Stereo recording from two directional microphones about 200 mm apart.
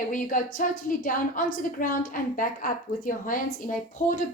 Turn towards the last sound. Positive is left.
turn(degrees=40)  # may be behind; listen again after turning